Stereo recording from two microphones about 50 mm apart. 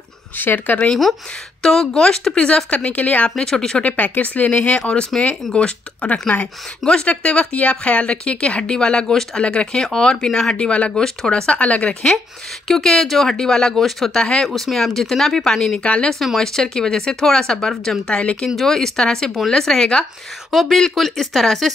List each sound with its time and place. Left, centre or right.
0.4 s speech: left
1.6 s speech: centre; by 3.3 s left
3.3 s speech: centre
3.8 s speech: left; by 10.6 s centre
10.6 s speech: left
12.6 s speech: centre
14.1 s speech: centre
14.5 s speech: centre
15.8 s speech: left
16.3 s speech: centre
18.1 s speech: left
18.6 s speech: centre
20.5 s speech: centre